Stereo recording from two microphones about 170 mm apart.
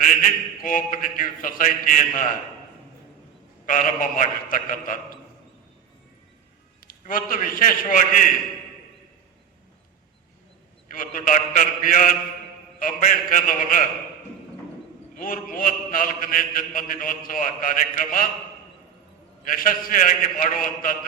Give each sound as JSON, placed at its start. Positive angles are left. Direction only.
{"t": 0.6, "sound": "a man's voice", "side_deg": 55}
{"t": 3.7, "sound": "a man's voice", "side_deg": 50}
{"t": 7.1, "sound": "a man's voice", "side_deg": 55}
{"t": 10.9, "sound": "a man's voice", "side_deg": 55}
{"t": 15.2, "sound": "a man's voice", "side_deg": 55}
{"t": 19.5, "sound": "a man's voice", "side_deg": 55}